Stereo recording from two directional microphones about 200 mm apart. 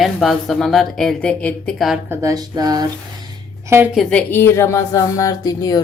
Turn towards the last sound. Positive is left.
turn(degrees=20)  # may be behind; listen again after turning